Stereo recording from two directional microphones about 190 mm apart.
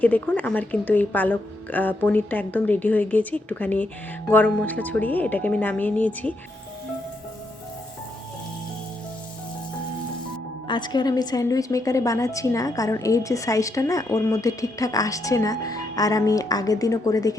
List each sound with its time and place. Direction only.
0.0 s a woman's voice: 10° left (ahead or behind)
10.7 s a woman's voice: 25° left (ahead or behind)